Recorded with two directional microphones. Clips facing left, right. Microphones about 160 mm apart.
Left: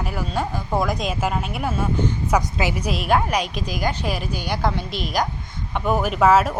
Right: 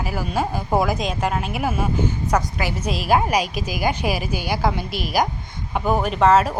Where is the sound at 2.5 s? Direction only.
15° left (ahead or behind).